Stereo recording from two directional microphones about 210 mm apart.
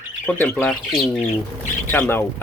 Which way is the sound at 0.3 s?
10° left (ahead or behind).